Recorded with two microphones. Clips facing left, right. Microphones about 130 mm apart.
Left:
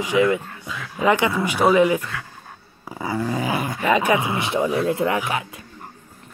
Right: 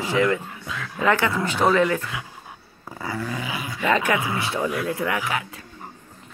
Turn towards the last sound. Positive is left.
turn(degrees=25)  # may be behind; listen again after turning